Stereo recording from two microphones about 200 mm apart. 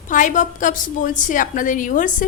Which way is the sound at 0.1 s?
40° left (ahead or behind).